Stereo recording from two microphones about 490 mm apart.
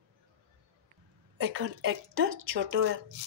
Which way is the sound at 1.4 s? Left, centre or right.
Right.